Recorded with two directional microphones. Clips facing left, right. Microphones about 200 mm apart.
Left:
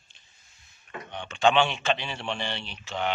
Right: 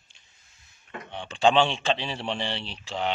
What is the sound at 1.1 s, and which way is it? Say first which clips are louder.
A man's voice: right 1 dB; 30° right (ahead or behind).